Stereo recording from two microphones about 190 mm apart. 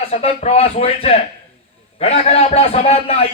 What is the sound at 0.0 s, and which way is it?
A man's voice, 30° left (ahead or behind).